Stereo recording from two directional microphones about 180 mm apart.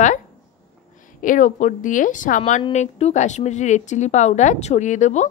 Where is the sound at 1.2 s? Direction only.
45° left (ahead or behind).